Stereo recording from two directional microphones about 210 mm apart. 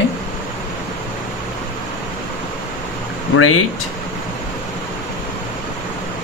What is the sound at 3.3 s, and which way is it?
Speech, 90° left.